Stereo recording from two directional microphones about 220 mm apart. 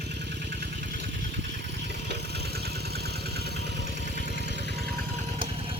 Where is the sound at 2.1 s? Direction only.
45° right (ahead or behind).